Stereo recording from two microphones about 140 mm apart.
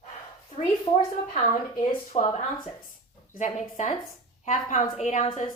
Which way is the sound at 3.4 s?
60° left (ahead or behind).